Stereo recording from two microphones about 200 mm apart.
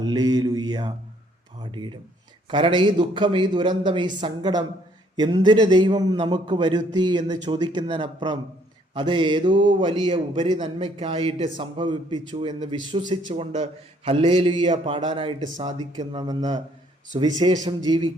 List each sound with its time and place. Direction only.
0.0 s mantra: 20° right (ahead or behind)
1.7 s a man's voice: 25° right (ahead or behind)